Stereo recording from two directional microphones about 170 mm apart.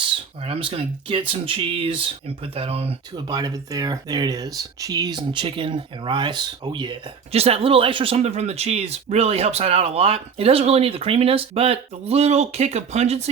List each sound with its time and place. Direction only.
0.4 s speech: 35° right (ahead or behind)